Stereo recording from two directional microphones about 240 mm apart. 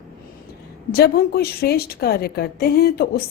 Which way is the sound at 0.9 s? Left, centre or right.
Left.